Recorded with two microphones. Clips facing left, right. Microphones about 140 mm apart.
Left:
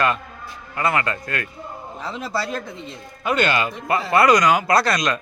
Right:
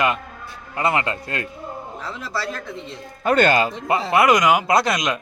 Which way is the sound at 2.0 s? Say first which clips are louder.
Left 3 dB; 15° left (ahead or behind).